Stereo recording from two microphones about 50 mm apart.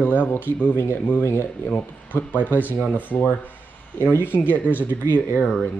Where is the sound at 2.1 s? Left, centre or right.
Left.